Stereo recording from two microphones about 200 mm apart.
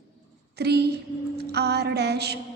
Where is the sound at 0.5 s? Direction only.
55° right (ahead or behind).